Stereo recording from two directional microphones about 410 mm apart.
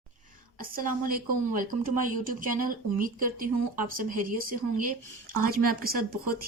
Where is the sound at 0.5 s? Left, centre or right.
Right.